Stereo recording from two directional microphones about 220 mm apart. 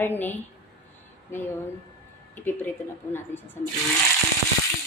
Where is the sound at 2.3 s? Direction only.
10° left (ahead or behind).